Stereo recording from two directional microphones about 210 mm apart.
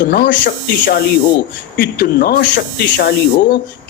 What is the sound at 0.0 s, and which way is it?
Speech, 45° left (ahead or behind).